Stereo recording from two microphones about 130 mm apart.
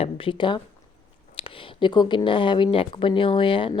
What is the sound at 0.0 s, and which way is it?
Speech, 45° left (ahead or behind).